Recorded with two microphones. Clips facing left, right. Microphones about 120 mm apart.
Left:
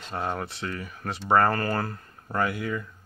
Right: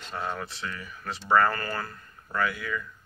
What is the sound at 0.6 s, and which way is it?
Speech, 35° left (ahead or behind).